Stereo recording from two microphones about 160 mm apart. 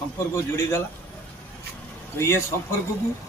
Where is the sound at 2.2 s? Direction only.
15° left (ahead or behind).